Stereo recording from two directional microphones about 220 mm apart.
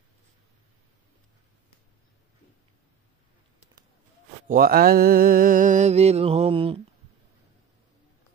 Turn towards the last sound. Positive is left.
turn(degrees=-25)  # may be behind; listen again after turning